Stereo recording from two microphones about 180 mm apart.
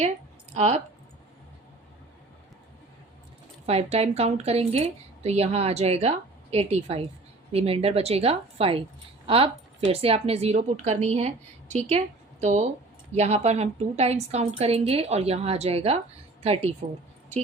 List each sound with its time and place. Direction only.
0.5 s speech: 40° right (ahead or behind)
3.7 s speech: 35° right (ahead or behind)